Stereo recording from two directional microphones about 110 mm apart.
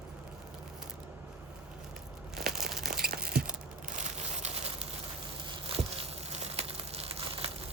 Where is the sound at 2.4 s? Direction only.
5° right (ahead or behind).